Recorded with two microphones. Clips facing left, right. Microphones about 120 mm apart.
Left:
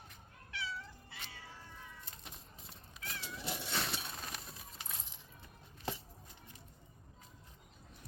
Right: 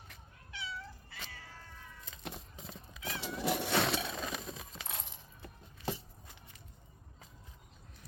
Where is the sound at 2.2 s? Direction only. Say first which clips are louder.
Right 9 dB; 85° right.